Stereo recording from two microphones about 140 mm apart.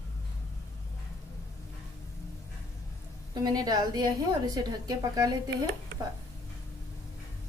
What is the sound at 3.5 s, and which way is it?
A woman's voice, 30° right (ahead or behind).